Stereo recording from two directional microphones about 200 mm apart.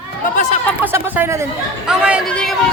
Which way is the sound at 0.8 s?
10° right (ahead or behind).